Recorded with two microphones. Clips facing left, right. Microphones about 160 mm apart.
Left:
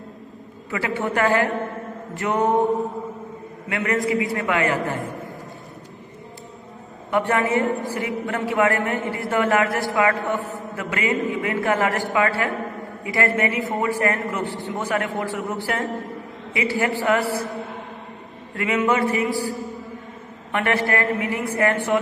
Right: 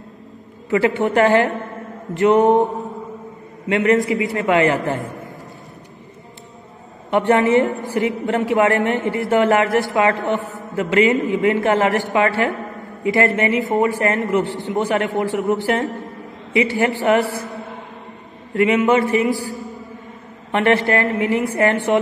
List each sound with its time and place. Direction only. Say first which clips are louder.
0.7 s a man's voice: right 8 dB; 25° right (ahead or behind)
3.6 s a man's voice: right 7 dB; 25° right (ahead or behind)
7.1 s a man's voice: right 6 dB; 25° right (ahead or behind)
17.1 s a man's voice: right 5 dB; 25° right (ahead or behind)
18.6 s a man's voice: right 5 dB; 25° right (ahead or behind)
19.3 s a woman's voice: left 1 dB; centre (ahead or behind)
20.5 s a man's voice: right 5 dB; 25° right (ahead or behind)